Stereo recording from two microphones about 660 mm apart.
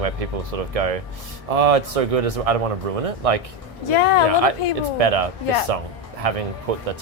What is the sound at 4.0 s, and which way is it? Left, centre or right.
Speech, left.